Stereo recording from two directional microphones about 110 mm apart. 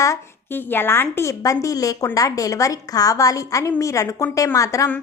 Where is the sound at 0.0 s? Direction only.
30° left (ahead or behind).